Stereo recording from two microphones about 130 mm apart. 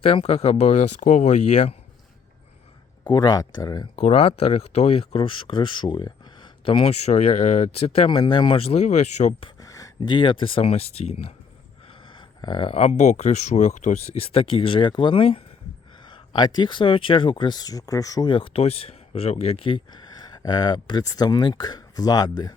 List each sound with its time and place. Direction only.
0.0 s speech: 50° left (ahead or behind)
3.1 s speech: 30° left (ahead or behind)
4.0 s speech: 50° left (ahead or behind)
7.0 s speech: 55° left (ahead or behind)
9.6 s a sound: 25° left (ahead or behind)
10.0 s speech: 40° left (ahead or behind); by 11.3 s 55° left (ahead or behind)
11.9 s speech: 40° left (ahead or behind)